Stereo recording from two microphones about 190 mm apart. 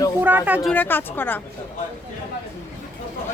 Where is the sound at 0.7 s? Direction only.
10° left (ahead or behind).